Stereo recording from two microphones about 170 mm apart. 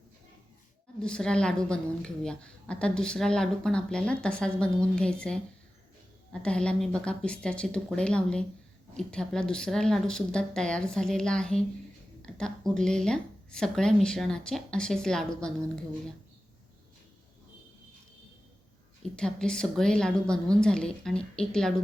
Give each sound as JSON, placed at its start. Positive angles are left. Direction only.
{"t": 1.0, "sound": "a woman's voice", "side_deg": 5}
{"t": 6.4, "sound": "a woman's voice", "side_deg": 5}
{"t": 19.1, "sound": "a woman's voice", "side_deg": 5}